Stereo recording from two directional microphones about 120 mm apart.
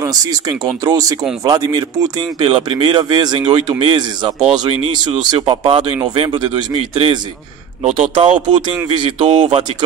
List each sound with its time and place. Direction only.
0.0 s speech: 30° right (ahead or behind)
7.8 s a man's voice: 75° right (ahead or behind)
8.1 s speech: 45° right (ahead or behind)